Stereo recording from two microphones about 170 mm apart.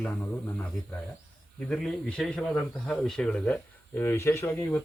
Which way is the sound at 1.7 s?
5° left (ahead or behind).